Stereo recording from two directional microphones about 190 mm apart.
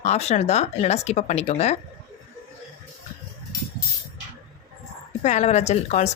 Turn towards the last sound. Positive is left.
turn(degrees=35)  # may be behind; listen again after turning